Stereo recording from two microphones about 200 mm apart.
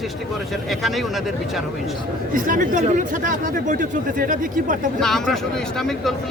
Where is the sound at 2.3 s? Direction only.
40° right (ahead or behind).